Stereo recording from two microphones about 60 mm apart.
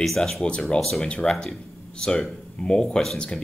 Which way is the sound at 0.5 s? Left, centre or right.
Centre.